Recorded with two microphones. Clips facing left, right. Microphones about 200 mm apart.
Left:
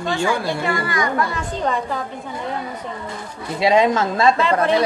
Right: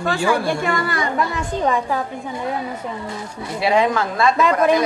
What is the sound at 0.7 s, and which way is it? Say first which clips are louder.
Speech: even; 35° right (ahead or behind).